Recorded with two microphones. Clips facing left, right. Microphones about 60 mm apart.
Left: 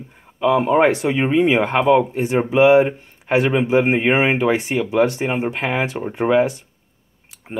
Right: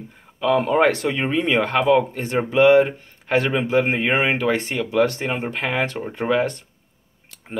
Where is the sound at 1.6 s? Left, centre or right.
Centre.